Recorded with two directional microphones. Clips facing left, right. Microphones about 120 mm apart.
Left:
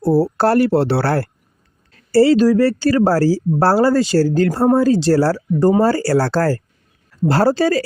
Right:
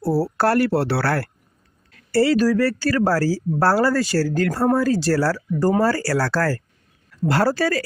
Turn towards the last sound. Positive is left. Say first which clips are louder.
# left 5 dB
turn(degrees=25)  # may be behind; listen again after turning